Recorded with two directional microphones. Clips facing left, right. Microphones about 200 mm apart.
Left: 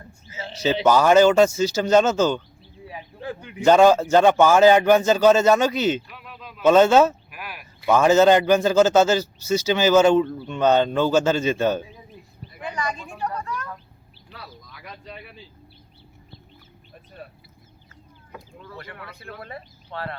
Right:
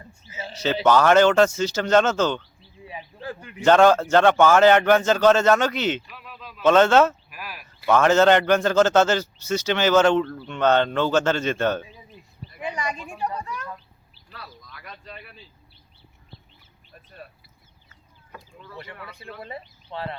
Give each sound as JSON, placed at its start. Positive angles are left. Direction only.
{"t": 0.5, "sound": "a man's voice", "side_deg": 10}
{"t": 2.9, "sound": "speech", "side_deg": -5}
{"t": 3.6, "sound": "a man's voice", "side_deg": 10}
{"t": 6.1, "sound": "a sound", "side_deg": 5}
{"t": 6.5, "sound": "a man's voice", "side_deg": 10}
{"t": 12.5, "sound": "a sound", "side_deg": -15}
{"t": 13.0, "sound": "speech", "side_deg": -15}
{"t": 14.3, "sound": "speech", "side_deg": 5}
{"t": 18.3, "sound": "a sound", "side_deg": 5}
{"t": 19.2, "sound": "speech", "side_deg": -20}